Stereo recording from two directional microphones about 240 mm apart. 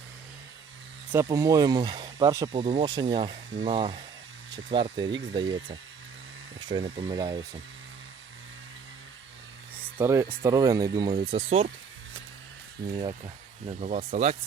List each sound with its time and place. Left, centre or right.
1.1 s speech: centre
6.6 s speech: centre
10.0 s speech: centre
13.0 s speech: centre